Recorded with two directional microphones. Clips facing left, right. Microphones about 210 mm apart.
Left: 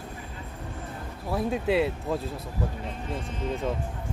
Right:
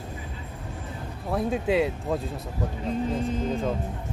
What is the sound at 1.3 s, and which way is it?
Speech, centre (ahead or behind).